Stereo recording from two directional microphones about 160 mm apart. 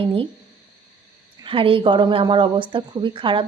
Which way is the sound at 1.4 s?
35° right (ahead or behind).